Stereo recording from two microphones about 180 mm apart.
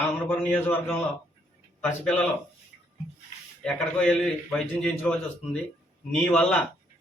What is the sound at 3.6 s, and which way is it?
A man's voice, 5° left (ahead or behind).